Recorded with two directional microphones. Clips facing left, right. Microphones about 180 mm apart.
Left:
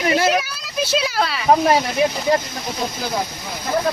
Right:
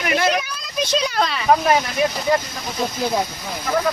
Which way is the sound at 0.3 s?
5° left (ahead or behind).